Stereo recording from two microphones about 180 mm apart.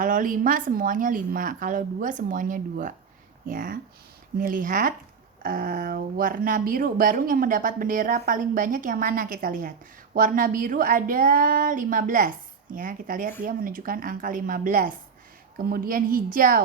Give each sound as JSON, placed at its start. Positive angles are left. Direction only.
{"t": 0.0, "sound": "speech", "side_deg": -50}